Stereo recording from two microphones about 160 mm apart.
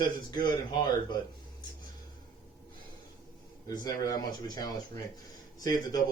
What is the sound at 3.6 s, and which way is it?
Speech, 25° left (ahead or behind).